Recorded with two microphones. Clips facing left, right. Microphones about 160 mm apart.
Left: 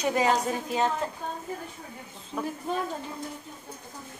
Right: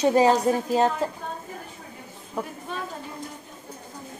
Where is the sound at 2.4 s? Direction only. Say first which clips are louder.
Even; 30° right (ahead or behind).